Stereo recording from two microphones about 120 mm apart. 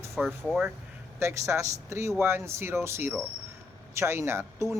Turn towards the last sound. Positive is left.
turn(degrees=-20)  # may be behind; listen again after turning